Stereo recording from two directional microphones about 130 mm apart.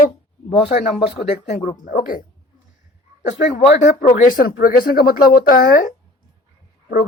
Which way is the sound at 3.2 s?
70° left (ahead or behind).